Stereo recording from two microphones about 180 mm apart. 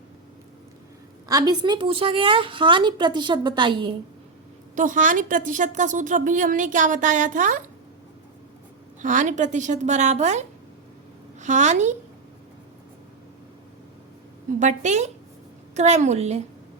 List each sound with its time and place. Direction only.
1.3 s a woman's voice: 20° right (ahead or behind)
4.7 s a woman's voice: 45° right (ahead or behind)
9.0 s a woman's voice: 45° right (ahead or behind)
14.6 s a woman's voice: 40° right (ahead or behind)